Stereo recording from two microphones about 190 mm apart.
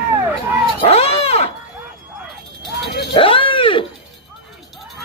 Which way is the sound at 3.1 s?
25° left (ahead or behind).